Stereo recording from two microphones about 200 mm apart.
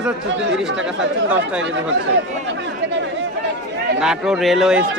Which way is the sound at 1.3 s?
5° right (ahead or behind).